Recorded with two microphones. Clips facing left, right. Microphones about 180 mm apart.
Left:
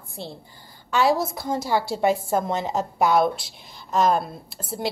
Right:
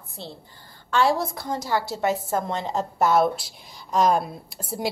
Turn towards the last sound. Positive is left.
turn(degrees=-10)  # may be behind; listen again after turning